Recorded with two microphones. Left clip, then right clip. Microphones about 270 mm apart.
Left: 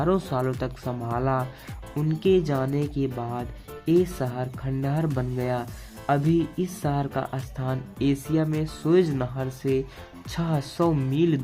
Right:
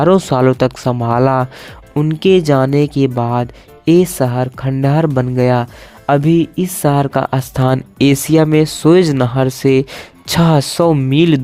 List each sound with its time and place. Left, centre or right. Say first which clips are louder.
0.0 s speech: right 14 dB; right